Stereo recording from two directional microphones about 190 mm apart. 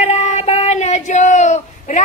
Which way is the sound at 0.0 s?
35° left (ahead or behind).